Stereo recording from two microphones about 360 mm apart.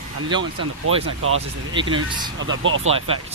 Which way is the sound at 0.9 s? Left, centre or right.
Right.